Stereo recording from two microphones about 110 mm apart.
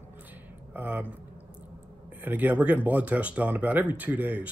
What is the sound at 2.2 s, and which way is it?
Speech, 15° right (ahead or behind).